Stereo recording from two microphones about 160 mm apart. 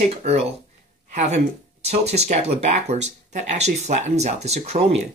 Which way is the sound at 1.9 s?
45° right (ahead or behind).